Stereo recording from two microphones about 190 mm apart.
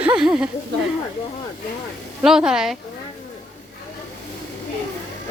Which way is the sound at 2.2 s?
5° right (ahead or behind).